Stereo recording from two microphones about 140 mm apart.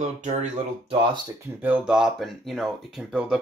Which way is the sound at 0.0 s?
55° right (ahead or behind).